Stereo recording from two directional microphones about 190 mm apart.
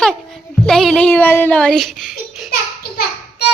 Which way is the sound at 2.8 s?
55° left (ahead or behind).